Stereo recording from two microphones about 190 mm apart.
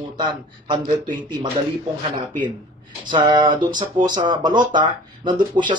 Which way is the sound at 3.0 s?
25° right (ahead or behind).